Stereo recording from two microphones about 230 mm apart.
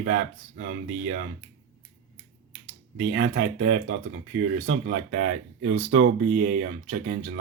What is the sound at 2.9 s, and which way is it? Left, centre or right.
Speech, right.